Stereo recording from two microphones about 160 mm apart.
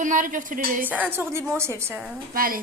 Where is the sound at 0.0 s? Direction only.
55° right (ahead or behind).